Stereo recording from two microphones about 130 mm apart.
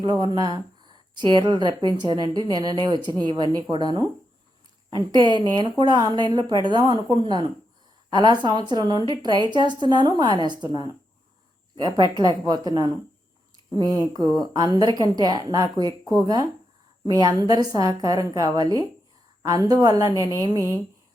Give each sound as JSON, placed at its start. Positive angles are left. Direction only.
{"t": 0.0, "sound": "a woman's voice", "side_deg": -35}